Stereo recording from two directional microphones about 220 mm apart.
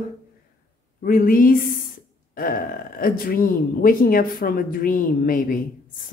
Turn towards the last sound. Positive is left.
turn(degrees=40)  # may be behind; listen again after turning